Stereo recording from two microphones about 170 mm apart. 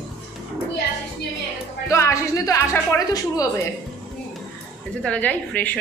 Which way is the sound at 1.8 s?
15° left (ahead or behind).